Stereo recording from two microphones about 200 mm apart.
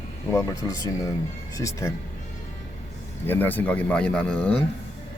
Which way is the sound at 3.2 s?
10° left (ahead or behind).